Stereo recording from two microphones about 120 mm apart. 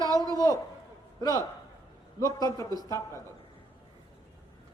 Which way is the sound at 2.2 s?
30° left (ahead or behind).